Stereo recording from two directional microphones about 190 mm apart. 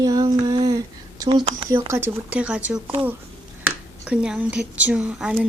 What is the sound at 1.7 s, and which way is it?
Speech, 15° right (ahead or behind).